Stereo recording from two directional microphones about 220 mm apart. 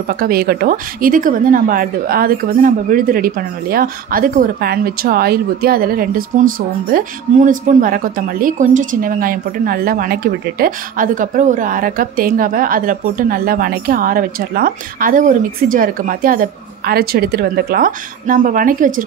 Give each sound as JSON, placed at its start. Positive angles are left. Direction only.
{"t": 0.1, "sound": "a woman's voice", "side_deg": -45}